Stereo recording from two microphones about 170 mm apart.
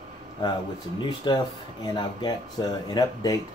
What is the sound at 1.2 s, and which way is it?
Speech, 25° left (ahead or behind).